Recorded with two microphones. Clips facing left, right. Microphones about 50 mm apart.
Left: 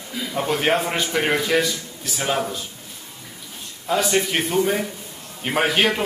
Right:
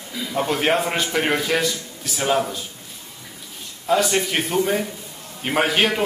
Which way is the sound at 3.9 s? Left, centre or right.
Centre.